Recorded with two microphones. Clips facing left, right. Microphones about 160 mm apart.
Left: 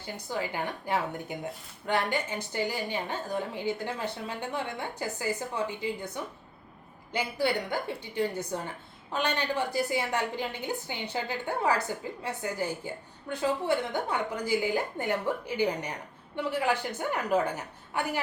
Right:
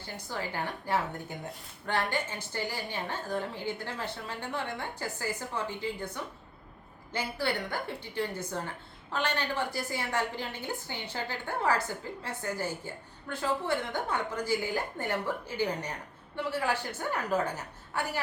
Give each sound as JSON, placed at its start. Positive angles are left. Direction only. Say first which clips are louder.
{"t": 0.0, "sound": "a woman's voice", "louder": "left 3 dB", "side_deg": 15}
{"t": 7.1, "sound": "a woman's voice", "louder": "left 3 dB", "side_deg": 15}